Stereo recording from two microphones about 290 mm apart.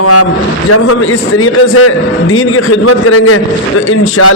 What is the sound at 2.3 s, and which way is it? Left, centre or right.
A man's voice, left.